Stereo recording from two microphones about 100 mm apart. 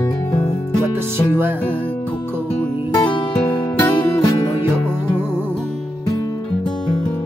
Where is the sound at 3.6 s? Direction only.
30° left (ahead or behind).